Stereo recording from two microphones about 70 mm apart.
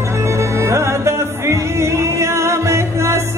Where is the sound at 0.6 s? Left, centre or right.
Right.